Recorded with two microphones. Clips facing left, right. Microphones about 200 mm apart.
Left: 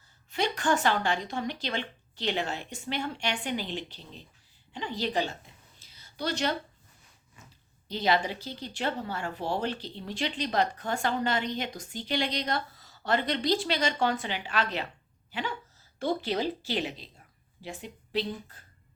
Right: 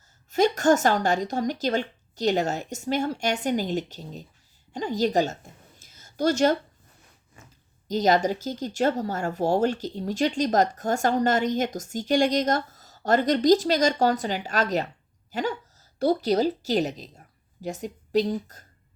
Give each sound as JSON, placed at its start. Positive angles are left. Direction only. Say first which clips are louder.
{"t": 0.3, "sound": "speech", "louder": "right 8 dB", "side_deg": -45}
{"t": 4.7, "sound": "a sound", "louder": "right 7 dB", "side_deg": -45}
{"t": 7.9, "sound": "a woman's voice", "louder": "right 6 dB", "side_deg": -45}